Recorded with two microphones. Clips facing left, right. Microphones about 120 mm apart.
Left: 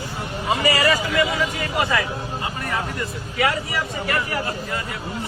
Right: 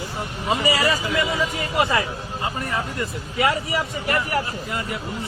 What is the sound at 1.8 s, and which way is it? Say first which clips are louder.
Speech: right 2 dB; 25° right (ahead or behind).